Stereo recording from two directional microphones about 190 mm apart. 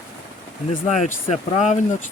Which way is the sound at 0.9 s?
35° left (ahead or behind).